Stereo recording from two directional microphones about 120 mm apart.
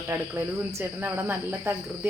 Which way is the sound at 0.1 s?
20° right (ahead or behind).